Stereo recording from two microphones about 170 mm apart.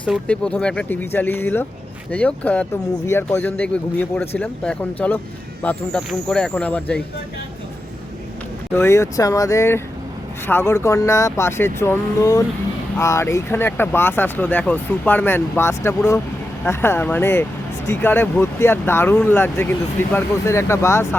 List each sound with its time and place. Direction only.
0.0 s speech: 5° left (ahead or behind)
8.7 s speech: 15° left (ahead or behind)